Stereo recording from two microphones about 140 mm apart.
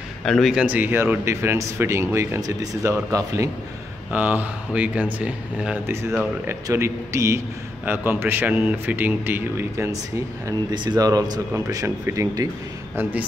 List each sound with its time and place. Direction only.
0.2 s a man's voice: centre (ahead or behind)
6.4 s a man's voice: 20° right (ahead or behind)
10.7 s a man's voice: 30° right (ahead or behind)